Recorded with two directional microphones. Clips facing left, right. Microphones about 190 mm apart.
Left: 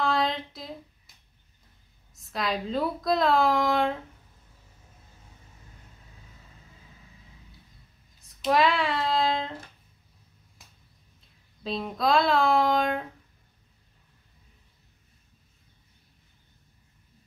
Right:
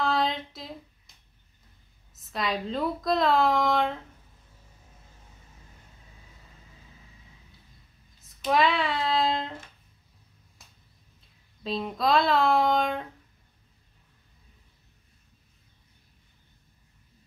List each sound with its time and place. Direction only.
0.0 s a sound: centre (ahead or behind)
2.1 s a woman's voice: centre (ahead or behind)
8.2 s speech: centre (ahead or behind)
11.6 s a woman's voice: centre (ahead or behind)